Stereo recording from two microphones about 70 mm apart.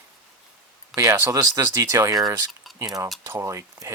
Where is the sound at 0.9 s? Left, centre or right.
Right.